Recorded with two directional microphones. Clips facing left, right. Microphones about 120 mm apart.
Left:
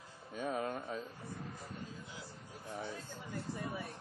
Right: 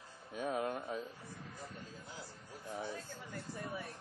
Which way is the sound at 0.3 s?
5° right (ahead or behind).